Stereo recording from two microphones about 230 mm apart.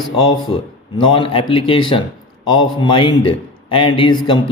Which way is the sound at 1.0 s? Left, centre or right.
Left.